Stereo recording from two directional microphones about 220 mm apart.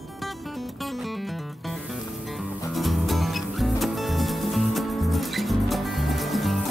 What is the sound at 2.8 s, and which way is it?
Music, centre (ahead or behind).